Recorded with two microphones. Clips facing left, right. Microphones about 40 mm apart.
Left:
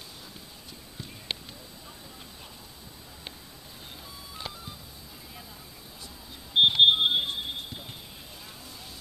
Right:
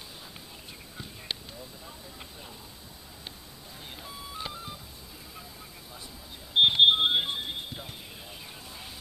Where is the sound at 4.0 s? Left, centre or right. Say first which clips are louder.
Right 3 dB; centre.